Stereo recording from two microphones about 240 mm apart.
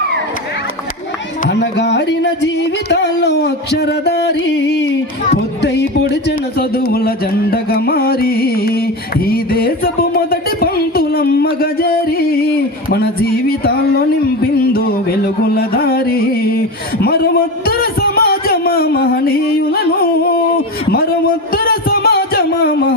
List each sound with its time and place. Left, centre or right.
1.5 s music: left
9.2 s a sound: left
14.4 s music: left
21.5 s music: left